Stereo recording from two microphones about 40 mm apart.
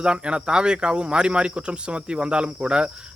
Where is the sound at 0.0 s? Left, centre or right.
Right.